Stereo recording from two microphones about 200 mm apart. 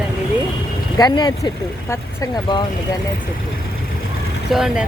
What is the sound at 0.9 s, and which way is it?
Speech, 20° left (ahead or behind).